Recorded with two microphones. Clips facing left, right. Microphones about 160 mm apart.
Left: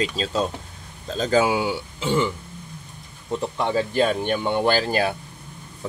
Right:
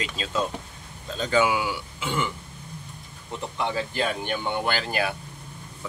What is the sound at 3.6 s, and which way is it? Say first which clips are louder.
Speech: left 6 dB; 40° left (ahead or behind).